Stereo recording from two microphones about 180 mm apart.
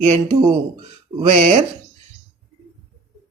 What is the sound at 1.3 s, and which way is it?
Speech, 35° right (ahead or behind).